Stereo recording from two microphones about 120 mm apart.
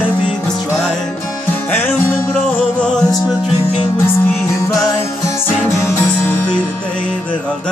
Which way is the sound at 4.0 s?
20° left (ahead or behind).